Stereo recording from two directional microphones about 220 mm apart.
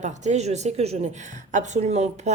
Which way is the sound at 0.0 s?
35° right (ahead or behind).